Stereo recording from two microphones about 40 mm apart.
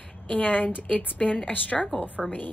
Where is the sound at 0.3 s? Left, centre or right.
Left.